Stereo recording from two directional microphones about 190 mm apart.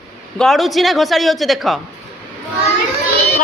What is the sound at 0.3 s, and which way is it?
A woman's voice, centre (ahead or behind).